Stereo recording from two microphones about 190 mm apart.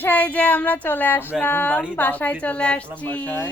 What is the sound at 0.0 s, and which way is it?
A woman's voice, 10° left (ahead or behind).